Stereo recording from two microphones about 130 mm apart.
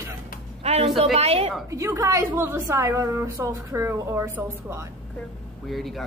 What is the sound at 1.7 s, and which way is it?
A woman's voice, 20° right (ahead or behind).